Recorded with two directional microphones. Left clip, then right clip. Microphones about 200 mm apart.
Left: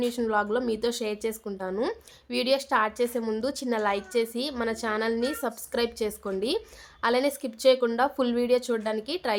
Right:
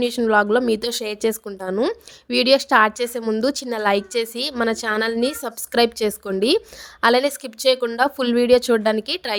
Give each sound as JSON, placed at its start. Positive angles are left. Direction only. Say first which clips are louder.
{"t": 0.0, "sound": "a woman's voice", "louder": "right 9 dB", "side_deg": -40}